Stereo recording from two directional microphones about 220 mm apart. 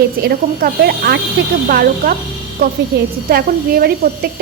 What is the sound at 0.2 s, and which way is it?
A woman's voice, 45° right (ahead or behind).